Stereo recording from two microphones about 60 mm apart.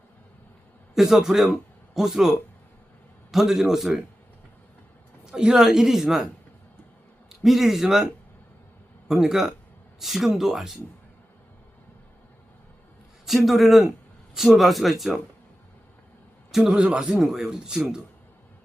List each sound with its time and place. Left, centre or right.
0.9 s speech: centre
3.3 s speech: centre
5.2 s speech: centre
7.3 s speech: centre
9.0 s speech: centre
13.2 s speech: centre
16.5 s a man's voice: centre
16.7 s speech: centre